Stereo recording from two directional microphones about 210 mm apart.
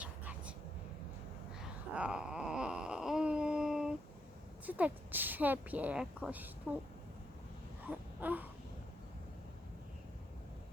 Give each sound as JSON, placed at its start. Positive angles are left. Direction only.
{"t": 0.0, "sound": "vehicle", "side_deg": -5}
{"t": 1.6, "sound": "wail", "side_deg": -5}
{"t": 4.6, "sound": "speech", "side_deg": -10}
{"t": 7.9, "sound": "a sound", "side_deg": -10}